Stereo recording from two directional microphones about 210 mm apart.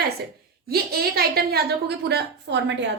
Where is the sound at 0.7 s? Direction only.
45° right (ahead or behind).